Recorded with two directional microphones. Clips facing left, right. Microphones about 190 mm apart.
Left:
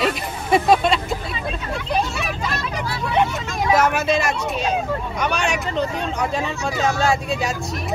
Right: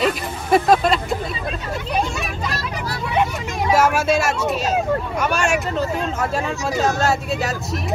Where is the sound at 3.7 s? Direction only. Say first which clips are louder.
Right 1 dB; 10° right (ahead or behind).